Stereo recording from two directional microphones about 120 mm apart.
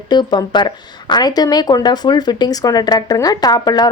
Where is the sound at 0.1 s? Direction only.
35° left (ahead or behind).